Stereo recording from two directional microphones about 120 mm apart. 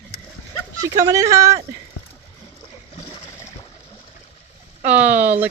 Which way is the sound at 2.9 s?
55° left (ahead or behind).